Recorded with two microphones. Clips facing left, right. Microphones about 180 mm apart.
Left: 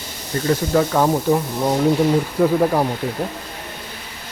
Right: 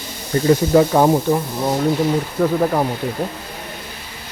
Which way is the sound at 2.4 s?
Centre (ahead or behind).